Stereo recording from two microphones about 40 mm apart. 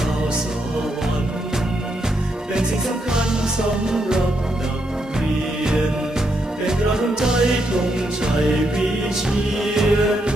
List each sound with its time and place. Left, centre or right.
3.1 s music: centre
6.7 s music: centre
9.3 s music: centre